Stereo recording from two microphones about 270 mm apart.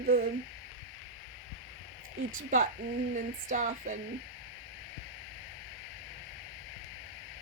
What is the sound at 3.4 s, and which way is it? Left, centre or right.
Speech, right.